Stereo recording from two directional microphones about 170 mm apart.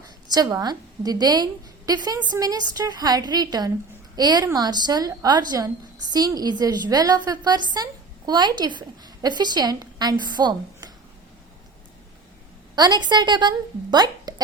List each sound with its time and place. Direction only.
0.3 s a woman's voice: 25° right (ahead or behind)
12.7 s a woman's voice: 25° right (ahead or behind)